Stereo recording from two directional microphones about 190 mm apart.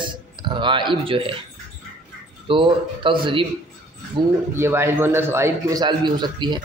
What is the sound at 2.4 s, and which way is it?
A man's voice, 25° right (ahead or behind).